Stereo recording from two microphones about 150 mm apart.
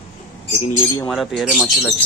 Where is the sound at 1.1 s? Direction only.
Centre (ahead or behind).